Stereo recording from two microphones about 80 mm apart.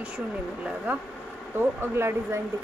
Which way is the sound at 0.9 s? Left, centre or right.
Right.